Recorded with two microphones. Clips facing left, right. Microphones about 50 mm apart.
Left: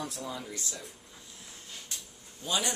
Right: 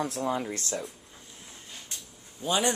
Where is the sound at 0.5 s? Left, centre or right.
Right.